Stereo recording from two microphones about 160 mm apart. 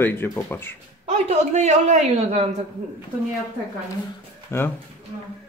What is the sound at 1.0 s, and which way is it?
A woman's voice, 45° right (ahead or behind).